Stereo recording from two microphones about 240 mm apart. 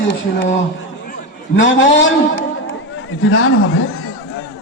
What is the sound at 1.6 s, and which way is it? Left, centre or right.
A man's voice, left.